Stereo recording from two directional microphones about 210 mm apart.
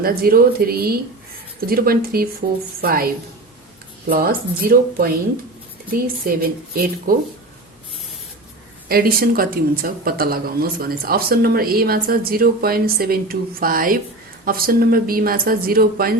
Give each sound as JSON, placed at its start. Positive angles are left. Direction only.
{"t": 0.0, "sound": "speech", "side_deg": -45}
{"t": 4.1, "sound": "speech", "side_deg": -45}
{"t": 8.9, "sound": "speech", "side_deg": -45}